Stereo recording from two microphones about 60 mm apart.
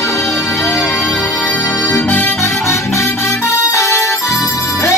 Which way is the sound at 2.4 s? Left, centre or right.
Left.